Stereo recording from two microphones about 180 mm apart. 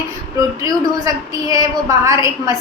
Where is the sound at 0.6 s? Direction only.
20° right (ahead or behind).